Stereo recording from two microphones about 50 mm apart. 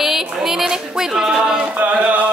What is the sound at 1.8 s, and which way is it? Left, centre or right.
Music, right.